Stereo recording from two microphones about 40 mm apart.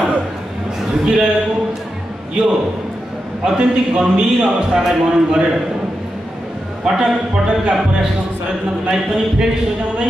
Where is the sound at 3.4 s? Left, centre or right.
Right.